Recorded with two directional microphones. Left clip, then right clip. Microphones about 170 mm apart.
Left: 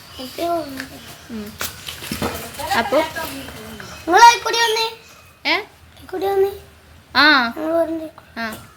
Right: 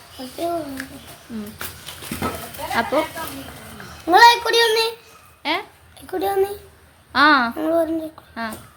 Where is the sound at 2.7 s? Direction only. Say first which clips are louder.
Left 3 dB; 10° right (ahead or behind).